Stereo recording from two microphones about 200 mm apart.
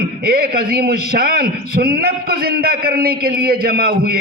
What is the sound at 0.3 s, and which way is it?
A man's voice, 50° right (ahead or behind).